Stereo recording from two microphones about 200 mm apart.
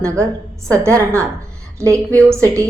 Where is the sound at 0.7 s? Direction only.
15° right (ahead or behind).